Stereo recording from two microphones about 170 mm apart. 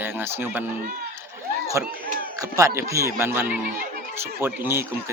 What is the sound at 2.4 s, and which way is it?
A man's voice, 20° right (ahead or behind).